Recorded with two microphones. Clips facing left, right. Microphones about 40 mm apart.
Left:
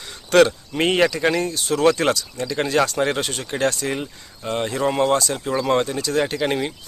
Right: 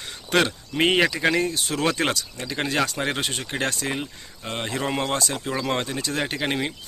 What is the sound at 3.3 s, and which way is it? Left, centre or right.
Speech, right.